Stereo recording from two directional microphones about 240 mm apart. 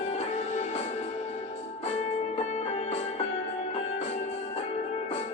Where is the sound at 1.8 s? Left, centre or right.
Left.